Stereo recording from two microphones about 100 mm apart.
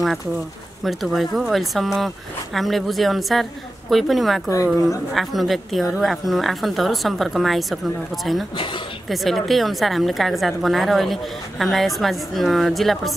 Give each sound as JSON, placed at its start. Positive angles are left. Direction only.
{"t": 0.8, "sound": "a woman's voice", "side_deg": 0}
{"t": 8.5, "sound": "a woman's voice", "side_deg": 55}
{"t": 9.1, "sound": "a woman's voice", "side_deg": 0}